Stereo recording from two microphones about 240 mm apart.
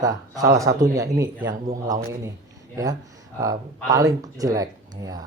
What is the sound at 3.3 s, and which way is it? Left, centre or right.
Speech, centre.